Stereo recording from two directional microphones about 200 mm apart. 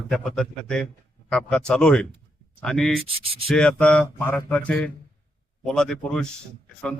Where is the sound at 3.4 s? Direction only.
5° left (ahead or behind).